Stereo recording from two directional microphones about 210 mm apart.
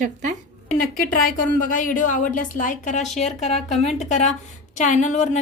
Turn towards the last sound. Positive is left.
turn(degrees=35)  # may be behind; listen again after turning